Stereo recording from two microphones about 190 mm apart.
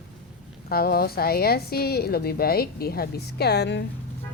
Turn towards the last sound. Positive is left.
turn(degrees=60)  # may be behind; listen again after turning